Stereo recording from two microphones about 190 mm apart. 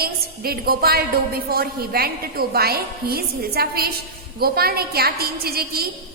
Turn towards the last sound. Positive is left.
turn(degrees=-55)  # may be behind; listen again after turning